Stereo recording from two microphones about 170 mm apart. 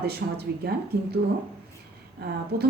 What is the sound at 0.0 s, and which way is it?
Speech, 70° right (ahead or behind).